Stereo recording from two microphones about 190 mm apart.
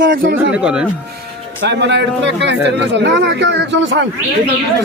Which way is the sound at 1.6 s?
70° right (ahead or behind).